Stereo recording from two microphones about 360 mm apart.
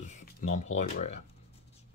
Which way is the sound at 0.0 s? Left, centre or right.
Centre.